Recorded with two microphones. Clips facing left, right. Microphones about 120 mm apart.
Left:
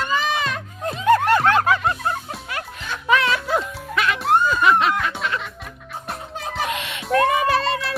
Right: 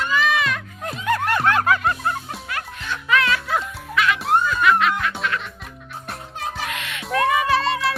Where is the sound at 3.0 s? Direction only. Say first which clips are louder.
Left 2 dB; 25° left (ahead or behind).